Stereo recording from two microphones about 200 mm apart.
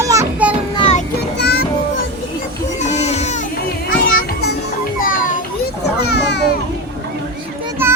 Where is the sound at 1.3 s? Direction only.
55° left (ahead or behind).